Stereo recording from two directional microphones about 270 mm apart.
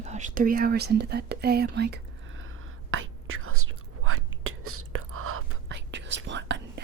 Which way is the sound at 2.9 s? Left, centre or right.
Right.